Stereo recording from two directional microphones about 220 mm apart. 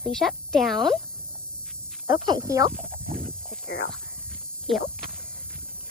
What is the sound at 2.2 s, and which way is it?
Speech, 15° right (ahead or behind).